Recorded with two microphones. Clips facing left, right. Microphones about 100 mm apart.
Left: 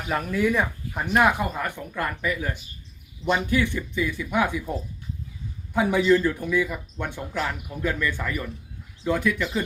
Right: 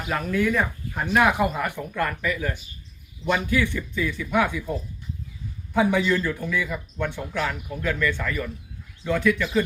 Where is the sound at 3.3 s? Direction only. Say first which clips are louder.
Even; 25° left (ahead or behind).